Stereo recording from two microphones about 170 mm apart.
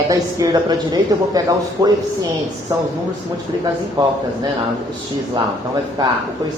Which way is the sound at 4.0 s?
25° right (ahead or behind).